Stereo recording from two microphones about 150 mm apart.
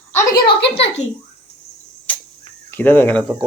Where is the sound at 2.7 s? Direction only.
10° left (ahead or behind).